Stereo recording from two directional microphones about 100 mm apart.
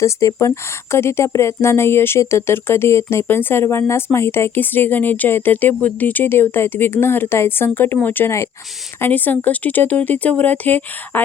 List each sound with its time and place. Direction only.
0.0 s speech: 30° left (ahead or behind)